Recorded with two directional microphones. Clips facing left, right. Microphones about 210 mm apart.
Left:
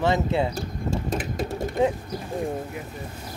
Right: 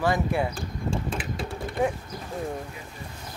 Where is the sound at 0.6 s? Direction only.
40° left (ahead or behind).